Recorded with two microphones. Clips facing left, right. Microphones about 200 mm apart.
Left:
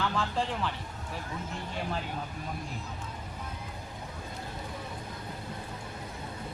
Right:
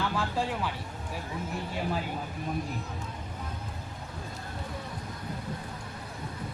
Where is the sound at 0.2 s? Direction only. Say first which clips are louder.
Right 1 dB; 10° right (ahead or behind).